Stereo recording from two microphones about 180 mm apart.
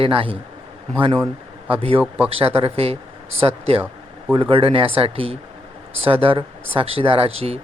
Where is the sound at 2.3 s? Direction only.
35° right (ahead or behind).